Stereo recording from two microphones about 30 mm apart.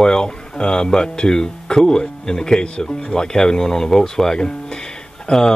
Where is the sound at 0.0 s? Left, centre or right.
Left.